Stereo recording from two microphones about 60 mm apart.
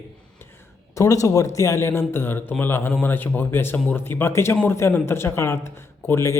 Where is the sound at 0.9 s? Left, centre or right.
Left.